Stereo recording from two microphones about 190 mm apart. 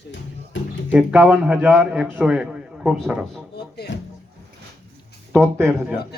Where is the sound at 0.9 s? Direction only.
10° right (ahead or behind).